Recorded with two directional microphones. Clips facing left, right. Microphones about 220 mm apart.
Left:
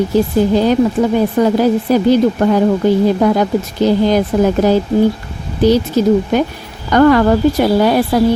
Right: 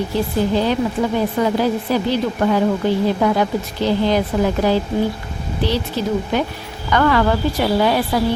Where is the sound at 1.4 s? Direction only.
45° left (ahead or behind).